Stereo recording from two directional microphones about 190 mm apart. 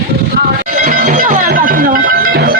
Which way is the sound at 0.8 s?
45° right (ahead or behind).